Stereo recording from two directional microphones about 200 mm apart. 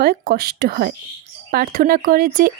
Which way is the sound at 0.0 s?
50° right (ahead or behind).